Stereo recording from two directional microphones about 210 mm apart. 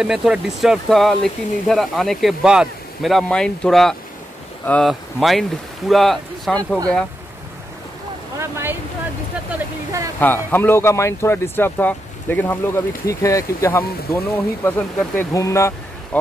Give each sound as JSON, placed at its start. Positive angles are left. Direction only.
{"t": 0.0, "sound": "speech", "side_deg": -5}
{"t": 8.4, "sound": "speech", "side_deg": -15}
{"t": 10.2, "sound": "speech", "side_deg": 10}